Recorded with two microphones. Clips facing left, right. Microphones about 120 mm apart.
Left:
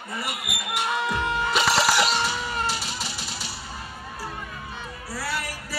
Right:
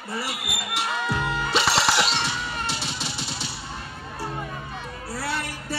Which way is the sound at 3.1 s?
25° right (ahead or behind).